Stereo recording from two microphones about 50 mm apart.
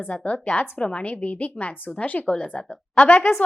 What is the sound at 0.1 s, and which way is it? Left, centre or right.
A woman's voice, left.